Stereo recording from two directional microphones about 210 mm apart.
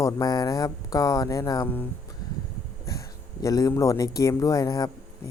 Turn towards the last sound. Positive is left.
turn(degrees=20)  # may be behind; listen again after turning